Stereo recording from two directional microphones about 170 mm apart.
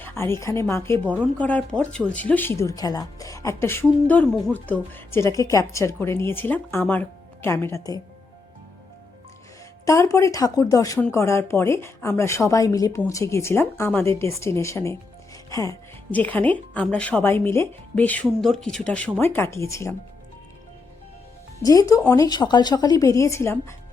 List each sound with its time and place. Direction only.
0.0 s a woman's voice: 15° left (ahead or behind)
9.8 s a woman's voice: 15° left (ahead or behind)
16.1 s a woman's voice: 10° left (ahead or behind)
21.6 s a woman's voice: 20° left (ahead or behind)